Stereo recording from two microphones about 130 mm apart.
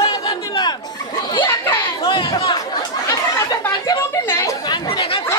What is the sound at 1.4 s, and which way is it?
Chatter, 20° left (ahead or behind).